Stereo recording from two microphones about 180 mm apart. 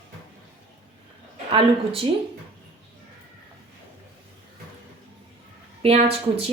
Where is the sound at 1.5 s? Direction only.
30° right (ahead or behind).